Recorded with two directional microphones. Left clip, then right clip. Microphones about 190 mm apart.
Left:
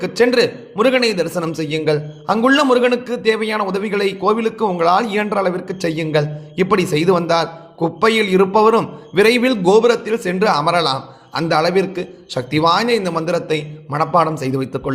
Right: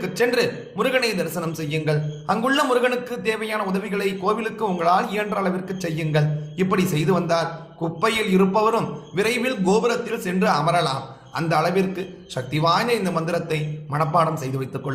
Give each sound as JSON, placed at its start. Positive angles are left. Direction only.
{"t": 0.0, "sound": "a man's voice", "side_deg": 40}